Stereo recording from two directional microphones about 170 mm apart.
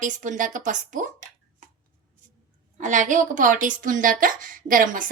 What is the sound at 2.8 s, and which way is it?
A woman's voice, 45° right (ahead or behind).